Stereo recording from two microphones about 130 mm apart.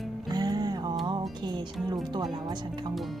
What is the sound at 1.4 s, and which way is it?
Speech, 35° right (ahead or behind).